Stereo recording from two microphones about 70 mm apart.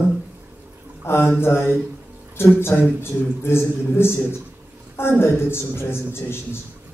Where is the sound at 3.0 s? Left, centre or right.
Left.